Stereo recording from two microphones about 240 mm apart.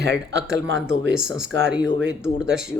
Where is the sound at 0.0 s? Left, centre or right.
Right.